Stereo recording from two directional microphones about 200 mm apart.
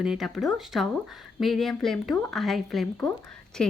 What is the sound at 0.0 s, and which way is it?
Speech, centre (ahead or behind).